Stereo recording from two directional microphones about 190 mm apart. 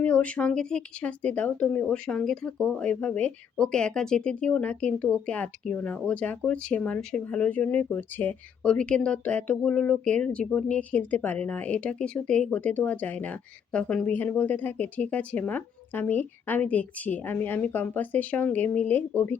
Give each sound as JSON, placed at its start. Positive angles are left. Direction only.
{"t": 0.0, "sound": "a woman's voice", "side_deg": 5}